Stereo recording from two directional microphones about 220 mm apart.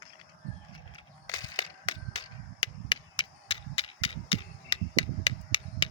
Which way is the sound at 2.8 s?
20° left (ahead or behind).